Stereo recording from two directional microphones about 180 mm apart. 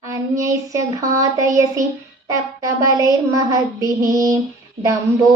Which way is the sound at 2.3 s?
20° right (ahead or behind).